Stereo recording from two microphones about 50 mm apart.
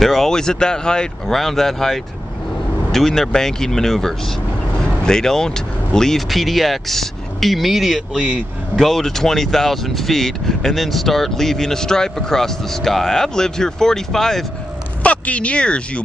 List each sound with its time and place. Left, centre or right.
0.0 s speech: centre
1.2 s speech: centre
15.0 s speech: left